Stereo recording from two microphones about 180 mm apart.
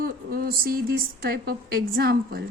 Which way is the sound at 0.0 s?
55° right (ahead or behind).